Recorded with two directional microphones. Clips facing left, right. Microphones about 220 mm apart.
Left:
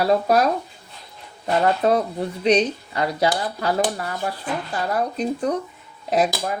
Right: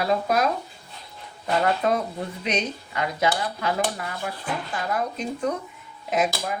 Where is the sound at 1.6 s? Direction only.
35° left (ahead or behind).